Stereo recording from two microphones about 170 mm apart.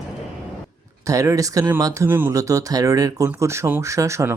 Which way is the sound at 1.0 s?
20° right (ahead or behind).